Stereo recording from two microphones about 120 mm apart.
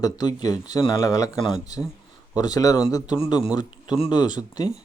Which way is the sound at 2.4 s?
30° left (ahead or behind).